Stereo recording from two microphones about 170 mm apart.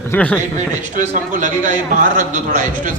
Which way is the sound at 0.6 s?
45° right (ahead or behind).